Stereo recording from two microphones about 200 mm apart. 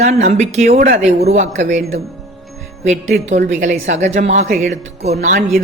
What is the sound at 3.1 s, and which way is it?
Speech, 35° right (ahead or behind).